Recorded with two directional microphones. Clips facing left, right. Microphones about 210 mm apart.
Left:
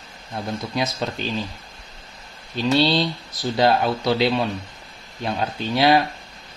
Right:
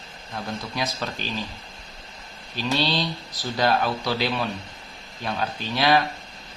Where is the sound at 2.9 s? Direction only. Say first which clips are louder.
Left 5 dB; 20° left (ahead or behind).